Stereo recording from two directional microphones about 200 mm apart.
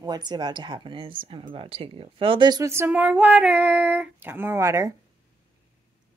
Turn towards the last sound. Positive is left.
turn(degrees=-15)  # may be behind; listen again after turning